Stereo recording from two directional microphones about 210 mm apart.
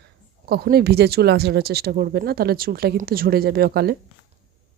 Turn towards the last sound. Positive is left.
turn(degrees=-50)  # may be behind; listen again after turning